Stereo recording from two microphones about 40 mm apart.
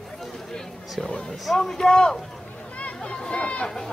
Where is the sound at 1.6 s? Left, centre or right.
Centre.